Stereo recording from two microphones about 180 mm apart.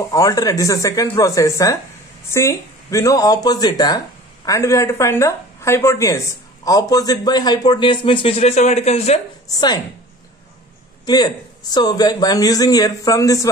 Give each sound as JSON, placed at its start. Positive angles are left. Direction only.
{"t": 0.1, "sound": "speech", "side_deg": 20}
{"t": 9.5, "sound": "speech", "side_deg": 25}
{"t": 11.1, "sound": "speech", "side_deg": 20}